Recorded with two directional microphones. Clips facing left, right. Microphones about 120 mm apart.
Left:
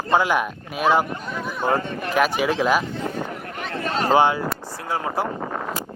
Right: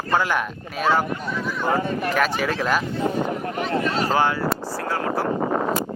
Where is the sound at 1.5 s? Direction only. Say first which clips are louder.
Left 1 dB; 20° left (ahead or behind).